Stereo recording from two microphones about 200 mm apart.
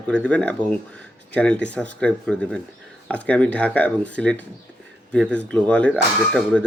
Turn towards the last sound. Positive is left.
turn(degrees=5)  # may be behind; listen again after turning